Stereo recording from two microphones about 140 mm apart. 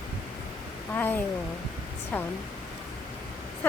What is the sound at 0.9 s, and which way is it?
Speech, 15° left (ahead or behind).